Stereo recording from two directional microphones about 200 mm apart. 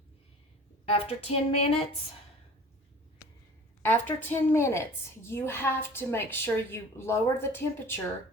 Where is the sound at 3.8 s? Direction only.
10° left (ahead or behind).